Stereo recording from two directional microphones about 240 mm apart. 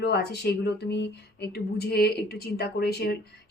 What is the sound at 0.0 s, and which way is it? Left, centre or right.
Speech, left.